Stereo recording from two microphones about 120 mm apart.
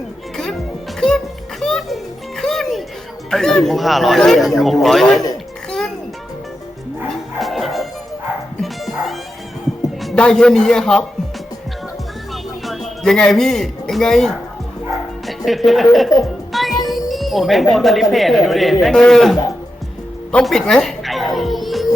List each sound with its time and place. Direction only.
0.9 s music: 5° left (ahead or behind)
3.2 s speech: 5° left (ahead or behind)
7.1 s music: centre (ahead or behind)
10.0 s speech: 5° left (ahead or behind)
12.3 s music: centre (ahead or behind)
15.4 s speech: centre (ahead or behind)
16.2 s music: centre (ahead or behind)
17.1 s speech: centre (ahead or behind)
20.4 s music: 5° left (ahead or behind)